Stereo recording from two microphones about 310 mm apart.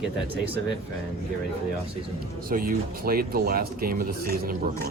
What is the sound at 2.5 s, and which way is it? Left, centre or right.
Speech, right.